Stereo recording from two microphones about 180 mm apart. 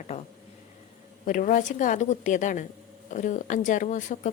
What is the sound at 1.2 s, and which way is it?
A woman's voice, 45° left (ahead or behind).